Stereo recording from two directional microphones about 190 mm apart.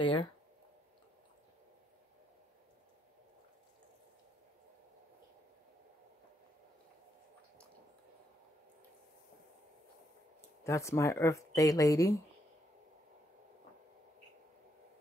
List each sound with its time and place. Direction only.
0.0 s speech: 25° left (ahead or behind)
10.6 s speech: 15° left (ahead or behind)